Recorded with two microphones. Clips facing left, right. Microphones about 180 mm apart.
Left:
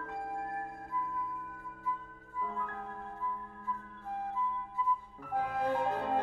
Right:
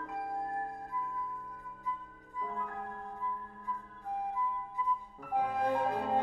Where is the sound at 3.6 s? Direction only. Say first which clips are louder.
Right 1 dB; 15° right (ahead or behind).